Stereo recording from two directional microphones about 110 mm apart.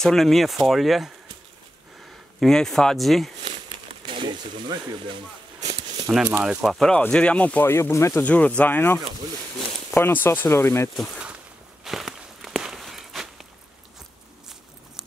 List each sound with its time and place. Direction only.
0.0 s speech: 5° left (ahead or behind)
2.4 s speech: 5° left (ahead or behind)
4.0 s speech: 50° right (ahead or behind)
6.1 s speech: 10° right (ahead or behind)
6.9 s speech: 10° left (ahead or behind)
8.2 s speech: 15° left (ahead or behind)
9.9 s speech: 20° left (ahead or behind)
11.8 s walk: centre (ahead or behind)